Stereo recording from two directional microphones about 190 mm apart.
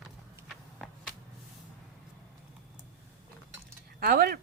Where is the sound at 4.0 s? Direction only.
55° right (ahead or behind).